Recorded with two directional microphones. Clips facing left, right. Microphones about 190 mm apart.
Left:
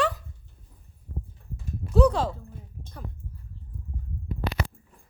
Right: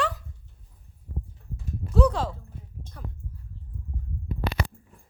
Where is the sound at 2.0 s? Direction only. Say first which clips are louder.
Left 2 dB; 20° left (ahead or behind).